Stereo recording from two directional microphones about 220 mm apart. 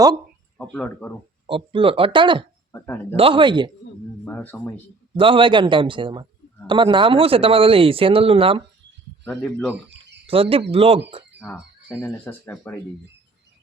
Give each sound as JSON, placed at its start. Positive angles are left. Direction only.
{"t": 0.5, "sound": "speech", "side_deg": 5}
{"t": 1.5, "sound": "speech", "side_deg": -25}
{"t": 2.7, "sound": "speech", "side_deg": 10}
{"t": 3.2, "sound": "speech", "side_deg": -25}
{"t": 4.3, "sound": "speech", "side_deg": 10}
{"t": 5.1, "sound": "speech", "side_deg": -25}
{"t": 9.2, "sound": "speech", "side_deg": 5}
{"t": 10.2, "sound": "speech", "side_deg": -25}
{"t": 11.3, "sound": "speech", "side_deg": 10}